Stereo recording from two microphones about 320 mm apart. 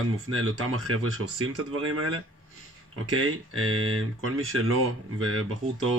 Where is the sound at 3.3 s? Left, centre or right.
Right.